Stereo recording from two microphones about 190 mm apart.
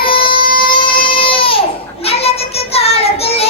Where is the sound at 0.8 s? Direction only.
25° left (ahead or behind).